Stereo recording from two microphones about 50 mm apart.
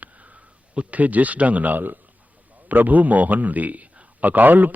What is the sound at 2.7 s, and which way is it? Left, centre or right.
A man's voice, right.